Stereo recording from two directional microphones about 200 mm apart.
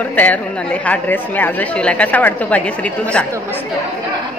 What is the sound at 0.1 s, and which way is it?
A woman's voice, 10° left (ahead or behind).